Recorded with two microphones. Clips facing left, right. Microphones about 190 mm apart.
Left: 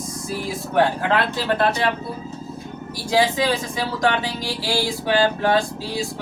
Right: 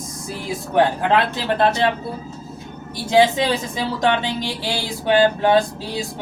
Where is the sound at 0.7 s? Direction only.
20° right (ahead or behind).